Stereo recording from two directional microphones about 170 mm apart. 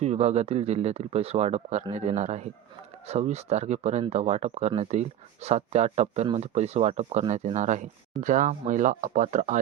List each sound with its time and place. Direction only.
0.0 s speech: 40° right (ahead or behind)